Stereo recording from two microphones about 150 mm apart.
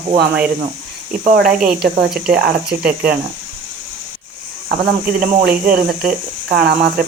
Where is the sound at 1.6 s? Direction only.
70° right (ahead or behind).